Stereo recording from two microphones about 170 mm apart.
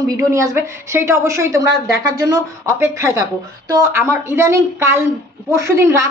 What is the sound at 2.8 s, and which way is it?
Speech, 15° right (ahead or behind).